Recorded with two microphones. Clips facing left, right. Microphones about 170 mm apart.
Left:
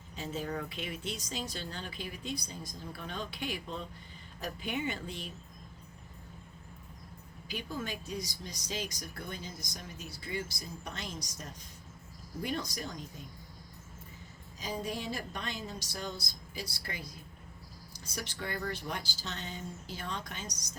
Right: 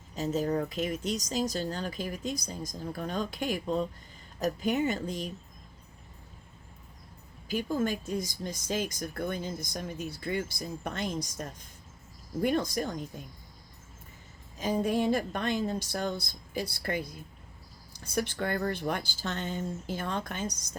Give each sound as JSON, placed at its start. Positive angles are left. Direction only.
{"t": 0.2, "sound": "speech", "side_deg": -40}
{"t": 7.4, "sound": "speech", "side_deg": -45}
{"t": 14.6, "sound": "speech", "side_deg": -55}